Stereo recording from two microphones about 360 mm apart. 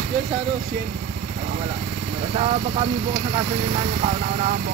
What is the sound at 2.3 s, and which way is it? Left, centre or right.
Speech, centre.